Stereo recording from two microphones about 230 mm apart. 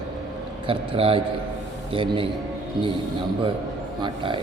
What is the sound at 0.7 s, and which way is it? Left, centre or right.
Speech, right.